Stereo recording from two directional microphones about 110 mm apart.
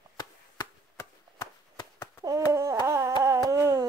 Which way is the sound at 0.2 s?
35° left (ahead or behind).